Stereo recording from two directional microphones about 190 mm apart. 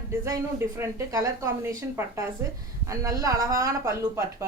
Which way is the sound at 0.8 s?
15° right (ahead or behind).